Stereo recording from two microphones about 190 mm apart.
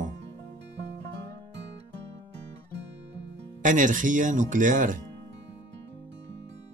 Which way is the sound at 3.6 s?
45° right (ahead or behind).